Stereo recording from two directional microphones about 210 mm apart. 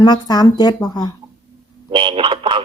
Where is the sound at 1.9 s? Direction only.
25° right (ahead or behind).